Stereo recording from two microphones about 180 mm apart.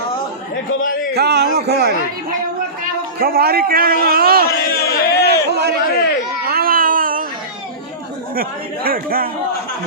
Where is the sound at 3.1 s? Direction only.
60° right (ahead or behind).